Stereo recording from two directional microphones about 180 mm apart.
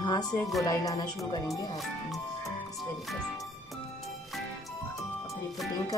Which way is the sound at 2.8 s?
Centre (ahead or behind).